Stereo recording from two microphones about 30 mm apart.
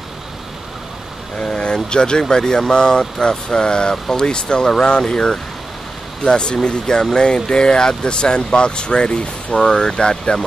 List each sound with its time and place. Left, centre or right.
1.4 s speech: left